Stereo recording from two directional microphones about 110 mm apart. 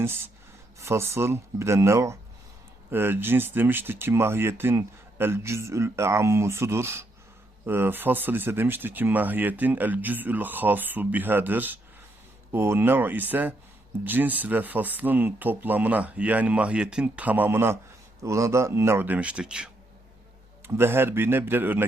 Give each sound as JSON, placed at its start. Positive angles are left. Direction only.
{"t": 0.8, "sound": "speech", "side_deg": -25}
{"t": 20.7, "sound": "speech", "side_deg": -20}